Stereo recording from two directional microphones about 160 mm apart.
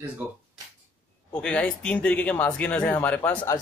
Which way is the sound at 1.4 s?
5° left (ahead or behind).